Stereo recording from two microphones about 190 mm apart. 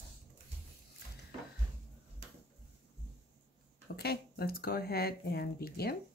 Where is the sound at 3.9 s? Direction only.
55° left (ahead or behind).